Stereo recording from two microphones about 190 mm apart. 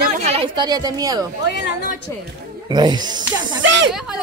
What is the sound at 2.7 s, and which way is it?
Speech, 20° right (ahead or behind).